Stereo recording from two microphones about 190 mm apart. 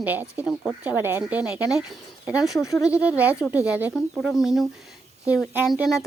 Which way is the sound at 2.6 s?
15° left (ahead or behind).